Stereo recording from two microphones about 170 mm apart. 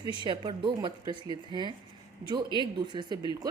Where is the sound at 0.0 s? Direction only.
30° right (ahead or behind).